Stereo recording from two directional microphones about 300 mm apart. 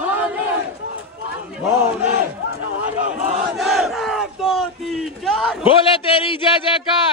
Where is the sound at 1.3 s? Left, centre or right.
Centre.